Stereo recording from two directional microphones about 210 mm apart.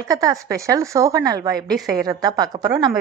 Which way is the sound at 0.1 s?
15° right (ahead or behind).